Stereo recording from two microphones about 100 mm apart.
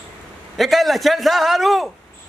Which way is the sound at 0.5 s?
Centre (ahead or behind).